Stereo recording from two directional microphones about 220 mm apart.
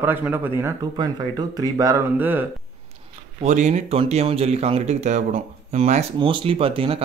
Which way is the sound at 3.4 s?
30° right (ahead or behind).